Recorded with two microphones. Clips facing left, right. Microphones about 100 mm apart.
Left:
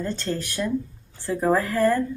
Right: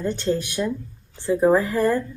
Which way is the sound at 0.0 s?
20° right (ahead or behind).